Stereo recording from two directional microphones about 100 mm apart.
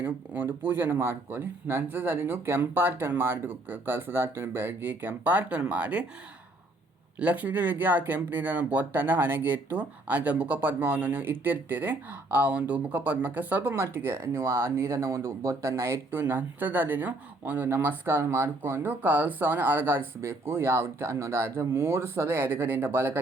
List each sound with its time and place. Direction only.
0.0 s speech: 20° right (ahead or behind)
7.2 s speech: 15° right (ahead or behind)